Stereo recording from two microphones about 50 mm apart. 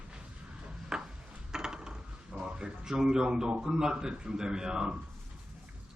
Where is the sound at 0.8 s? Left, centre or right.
Centre.